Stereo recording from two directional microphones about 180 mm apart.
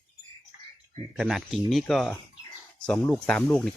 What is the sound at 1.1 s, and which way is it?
Speech, 5° right (ahead or behind).